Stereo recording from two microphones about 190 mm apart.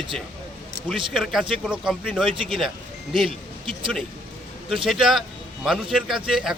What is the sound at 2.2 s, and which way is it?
Speech, 30° right (ahead or behind).